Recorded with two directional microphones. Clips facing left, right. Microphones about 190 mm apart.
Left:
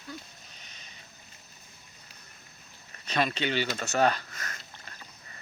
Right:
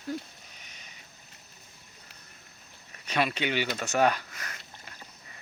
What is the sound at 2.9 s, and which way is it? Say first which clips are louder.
Speech: even; 10° right (ahead or behind).